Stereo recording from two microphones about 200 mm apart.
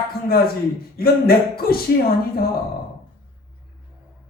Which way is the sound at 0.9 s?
50° left (ahead or behind).